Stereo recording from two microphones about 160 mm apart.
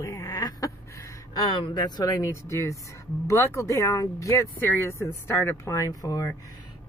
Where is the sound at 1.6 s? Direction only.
30° left (ahead or behind).